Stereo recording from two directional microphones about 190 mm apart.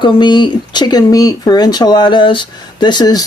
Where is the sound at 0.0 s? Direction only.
25° left (ahead or behind).